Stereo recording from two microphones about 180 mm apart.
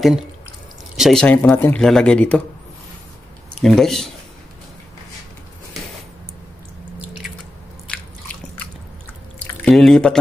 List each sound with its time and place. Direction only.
0.9 s speech: centre (ahead or behind)
3.6 s speech: centre (ahead or behind)
9.7 s speech: 5° left (ahead or behind)